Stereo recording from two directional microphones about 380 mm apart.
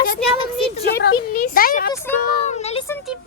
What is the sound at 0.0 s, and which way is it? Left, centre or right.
A woman's voice, left.